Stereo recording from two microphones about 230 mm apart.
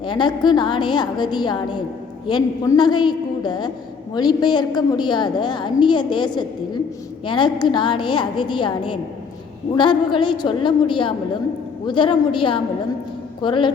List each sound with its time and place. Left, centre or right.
0.0 s a woman's voice: centre